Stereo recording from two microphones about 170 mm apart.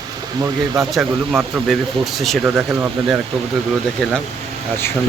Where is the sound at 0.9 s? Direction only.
10° right (ahead or behind).